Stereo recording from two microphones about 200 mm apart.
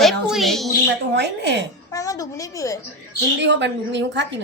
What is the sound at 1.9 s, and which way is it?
Speech, 15° left (ahead or behind).